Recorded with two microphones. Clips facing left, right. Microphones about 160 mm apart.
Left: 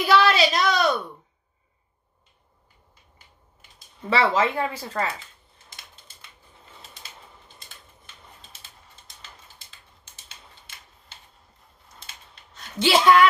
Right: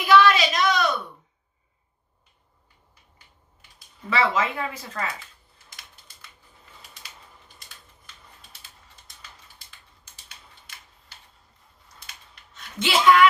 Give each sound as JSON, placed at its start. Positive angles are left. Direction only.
{"t": 0.0, "sound": "a sound", "side_deg": 35}
{"t": 4.1, "sound": "speech", "side_deg": 30}
{"t": 6.8, "sound": "bird", "side_deg": 25}
{"t": 12.5, "sound": "speech", "side_deg": 35}